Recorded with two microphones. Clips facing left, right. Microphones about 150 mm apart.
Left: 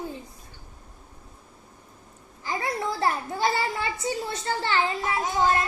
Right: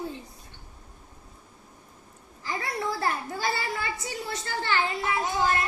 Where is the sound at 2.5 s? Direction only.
20° left (ahead or behind).